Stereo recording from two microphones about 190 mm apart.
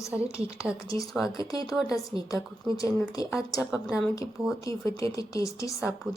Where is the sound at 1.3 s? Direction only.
20° left (ahead or behind).